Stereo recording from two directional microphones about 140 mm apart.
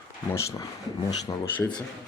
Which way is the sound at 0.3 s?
20° left (ahead or behind).